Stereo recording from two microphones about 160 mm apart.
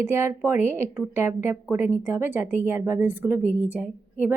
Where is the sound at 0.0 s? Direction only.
15° right (ahead or behind).